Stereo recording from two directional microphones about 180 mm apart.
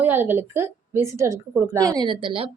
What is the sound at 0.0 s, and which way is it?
A woman's voice, 10° right (ahead or behind).